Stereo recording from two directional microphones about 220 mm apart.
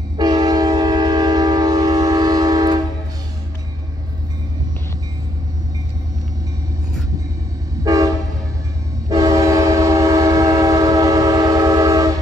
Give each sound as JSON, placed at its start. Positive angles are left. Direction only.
{"t": 0.2, "sound": "train", "side_deg": -20}
{"t": 7.8, "sound": "train", "side_deg": -15}
{"t": 9.1, "sound": "train", "side_deg": -15}